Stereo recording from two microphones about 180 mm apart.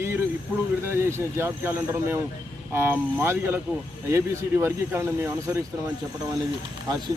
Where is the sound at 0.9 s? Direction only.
15° right (ahead or behind).